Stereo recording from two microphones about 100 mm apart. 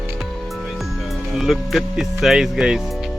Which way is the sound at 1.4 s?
Centre (ahead or behind).